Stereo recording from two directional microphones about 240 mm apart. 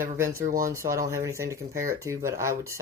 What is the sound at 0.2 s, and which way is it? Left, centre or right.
Speech, centre.